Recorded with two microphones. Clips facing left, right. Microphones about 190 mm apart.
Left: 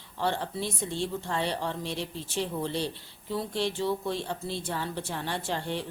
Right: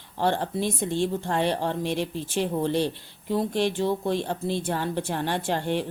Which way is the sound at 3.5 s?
15° right (ahead or behind).